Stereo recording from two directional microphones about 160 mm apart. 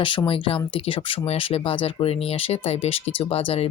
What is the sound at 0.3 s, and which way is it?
Speech, 35° left (ahead or behind).